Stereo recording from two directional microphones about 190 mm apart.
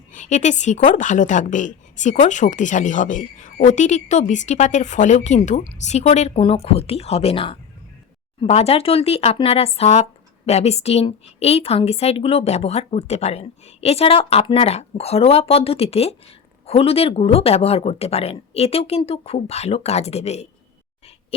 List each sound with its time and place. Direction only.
0.1 s speech: 40° left (ahead or behind)